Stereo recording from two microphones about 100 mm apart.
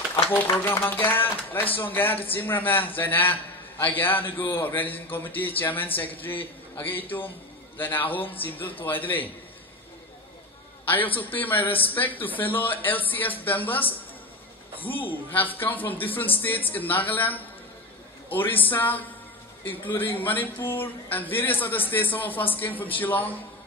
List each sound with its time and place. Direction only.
0.3 s a man's voice: 20° left (ahead or behind)
10.9 s a man's voice: 15° left (ahead or behind)